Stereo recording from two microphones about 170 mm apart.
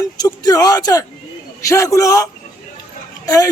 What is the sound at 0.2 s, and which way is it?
Speech, 20° left (ahead or behind).